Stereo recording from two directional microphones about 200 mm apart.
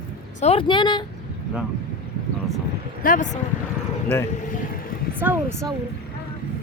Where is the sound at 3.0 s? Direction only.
45° left (ahead or behind).